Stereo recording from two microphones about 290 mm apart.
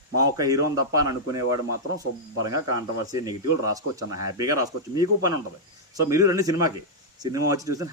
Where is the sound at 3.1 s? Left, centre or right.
Centre.